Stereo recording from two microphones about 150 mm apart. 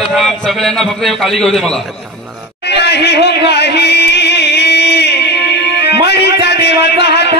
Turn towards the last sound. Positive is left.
turn(degrees=90)